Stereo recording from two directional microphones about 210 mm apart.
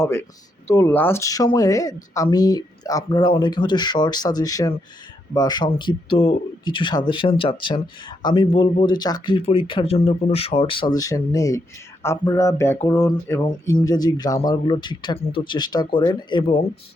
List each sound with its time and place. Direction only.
0.0 s speech: 10° left (ahead or behind)